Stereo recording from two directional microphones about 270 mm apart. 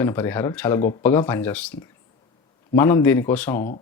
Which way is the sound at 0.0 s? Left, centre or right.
Centre.